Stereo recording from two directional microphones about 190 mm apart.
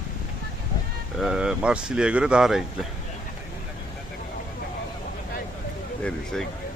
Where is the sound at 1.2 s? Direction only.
5° right (ahead or behind).